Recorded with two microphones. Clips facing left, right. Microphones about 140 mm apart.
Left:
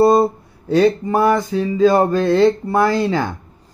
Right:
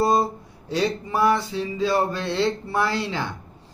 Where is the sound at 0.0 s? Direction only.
55° left (ahead or behind).